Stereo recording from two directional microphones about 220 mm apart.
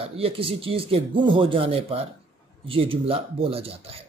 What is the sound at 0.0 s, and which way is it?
Speech, 25° right (ahead or behind).